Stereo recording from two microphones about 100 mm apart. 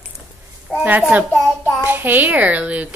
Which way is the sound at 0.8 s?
15° right (ahead or behind).